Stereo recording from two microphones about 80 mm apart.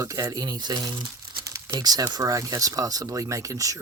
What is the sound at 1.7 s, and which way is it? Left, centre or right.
Speech, right.